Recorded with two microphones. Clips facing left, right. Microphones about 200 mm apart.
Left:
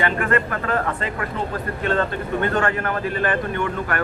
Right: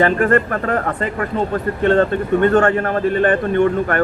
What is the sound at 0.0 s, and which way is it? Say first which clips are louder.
Speech: right 7 dB; 40° right (ahead or behind).